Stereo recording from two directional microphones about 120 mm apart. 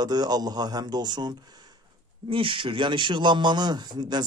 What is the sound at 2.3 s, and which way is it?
A man's voice, 45° right (ahead or behind).